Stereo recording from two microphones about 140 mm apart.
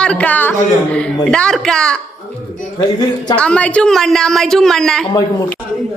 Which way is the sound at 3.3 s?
10° left (ahead or behind).